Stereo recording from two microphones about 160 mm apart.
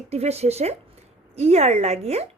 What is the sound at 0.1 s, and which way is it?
A woman's voice, 40° right (ahead or behind).